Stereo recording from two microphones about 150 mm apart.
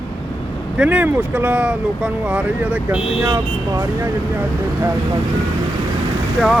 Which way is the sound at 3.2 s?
20° right (ahead or behind).